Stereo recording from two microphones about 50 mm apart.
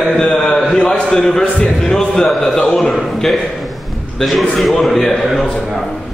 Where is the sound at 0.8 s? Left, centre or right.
Centre.